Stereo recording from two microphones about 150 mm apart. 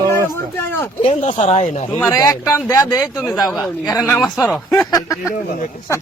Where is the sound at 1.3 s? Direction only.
45° left (ahead or behind).